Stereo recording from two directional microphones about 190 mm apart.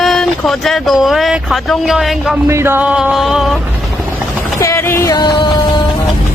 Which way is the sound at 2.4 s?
15° right (ahead or behind).